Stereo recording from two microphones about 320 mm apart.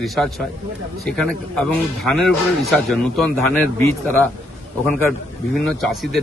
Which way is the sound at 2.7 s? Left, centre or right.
Centre.